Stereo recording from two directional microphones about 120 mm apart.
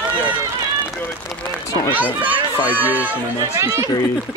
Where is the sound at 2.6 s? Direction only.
15° right (ahead or behind).